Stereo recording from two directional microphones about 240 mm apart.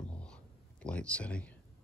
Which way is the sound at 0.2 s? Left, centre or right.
Centre.